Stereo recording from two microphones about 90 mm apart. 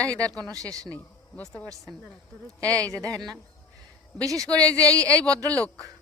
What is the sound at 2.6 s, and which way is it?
Speech, 15° left (ahead or behind).